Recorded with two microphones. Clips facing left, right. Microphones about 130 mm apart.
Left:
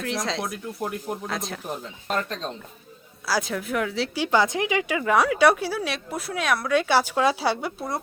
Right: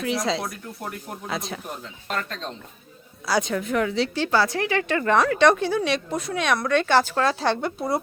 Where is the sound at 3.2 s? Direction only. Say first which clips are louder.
Right 3 dB; centre (ahead or behind).